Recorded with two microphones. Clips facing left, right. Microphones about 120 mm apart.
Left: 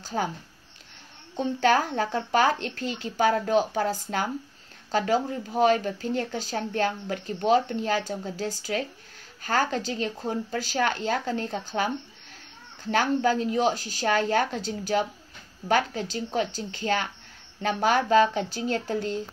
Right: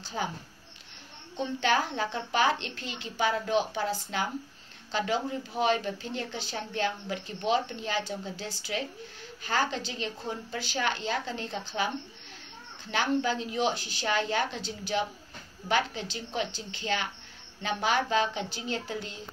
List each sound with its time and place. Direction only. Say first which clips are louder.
0.0 s speech: left 5 dB; 45° left (ahead or behind)
1.3 s speech: left 5 dB; 45° left (ahead or behind)
12.9 s speech: left 5 dB; 45° left (ahead or behind)